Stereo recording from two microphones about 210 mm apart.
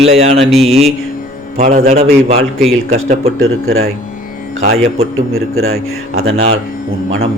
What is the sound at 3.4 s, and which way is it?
Speech, 75° right (ahead or behind).